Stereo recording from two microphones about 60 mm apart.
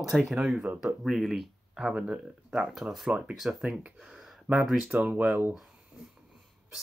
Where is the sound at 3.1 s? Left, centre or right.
Centre.